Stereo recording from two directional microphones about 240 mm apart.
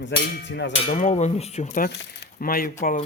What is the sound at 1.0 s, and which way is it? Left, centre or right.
Speech, left.